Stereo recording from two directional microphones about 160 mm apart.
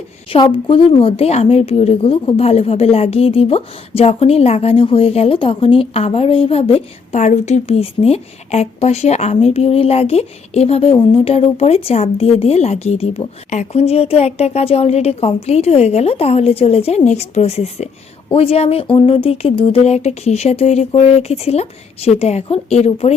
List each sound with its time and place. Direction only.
0.3 s a woman's voice: 35° left (ahead or behind)